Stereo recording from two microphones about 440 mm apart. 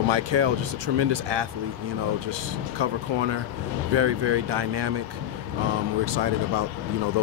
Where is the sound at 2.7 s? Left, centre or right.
Right.